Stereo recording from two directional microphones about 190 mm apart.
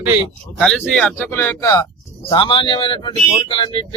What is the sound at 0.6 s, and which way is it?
Speech, 5° left (ahead or behind).